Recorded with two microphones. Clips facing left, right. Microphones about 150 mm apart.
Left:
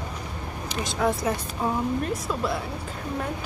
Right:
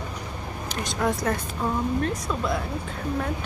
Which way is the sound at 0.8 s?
Centre (ahead or behind).